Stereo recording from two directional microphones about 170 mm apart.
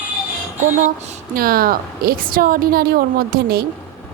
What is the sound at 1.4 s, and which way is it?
A woman's voice, 60° right (ahead or behind).